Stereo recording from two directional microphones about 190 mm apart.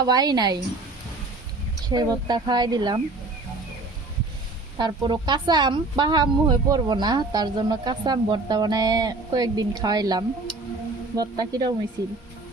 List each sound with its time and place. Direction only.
0.0 s a woman's voice: 20° right (ahead or behind)
1.9 s a woman's voice: 20° right (ahead or behind)
4.8 s a woman's voice: 25° right (ahead or behind)